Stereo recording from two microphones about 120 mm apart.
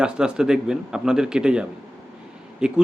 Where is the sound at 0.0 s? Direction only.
5° right (ahead or behind).